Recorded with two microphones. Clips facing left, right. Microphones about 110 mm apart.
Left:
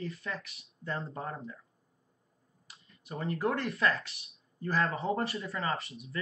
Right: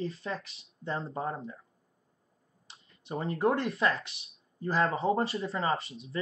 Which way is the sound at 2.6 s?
25° right (ahead or behind).